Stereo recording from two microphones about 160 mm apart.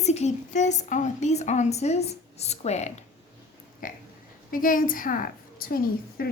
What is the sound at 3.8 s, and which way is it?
A woman's voice, 60° left (ahead or behind).